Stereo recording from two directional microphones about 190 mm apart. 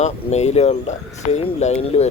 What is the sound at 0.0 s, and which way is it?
Speech, 35° left (ahead or behind).